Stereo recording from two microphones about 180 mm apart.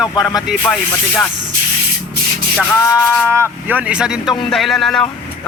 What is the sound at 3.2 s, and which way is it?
Speech, 15° right (ahead or behind).